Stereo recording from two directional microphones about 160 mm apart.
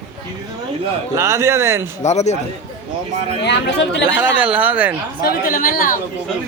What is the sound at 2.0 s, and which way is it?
Speech, 45° left (ahead or behind).